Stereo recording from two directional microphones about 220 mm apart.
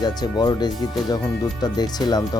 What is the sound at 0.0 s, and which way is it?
Speech, 20° left (ahead or behind).